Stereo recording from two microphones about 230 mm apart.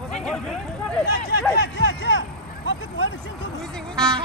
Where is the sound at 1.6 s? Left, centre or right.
Left.